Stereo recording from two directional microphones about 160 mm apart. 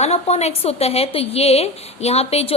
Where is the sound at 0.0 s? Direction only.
40° left (ahead or behind).